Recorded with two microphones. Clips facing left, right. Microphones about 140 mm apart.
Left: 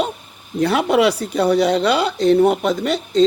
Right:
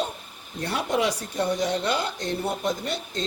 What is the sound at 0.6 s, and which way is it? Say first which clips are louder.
Speech: left 10 dB; 85° left.